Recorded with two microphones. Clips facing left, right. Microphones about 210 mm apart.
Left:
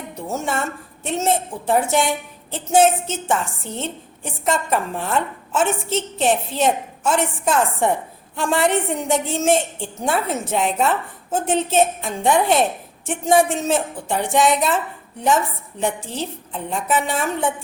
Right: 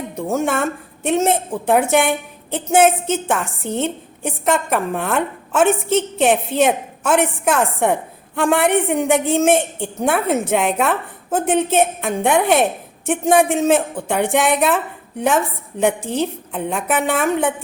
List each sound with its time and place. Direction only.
0.2 s a woman's voice: 55° right (ahead or behind)
15.8 s a woman's voice: 55° right (ahead or behind)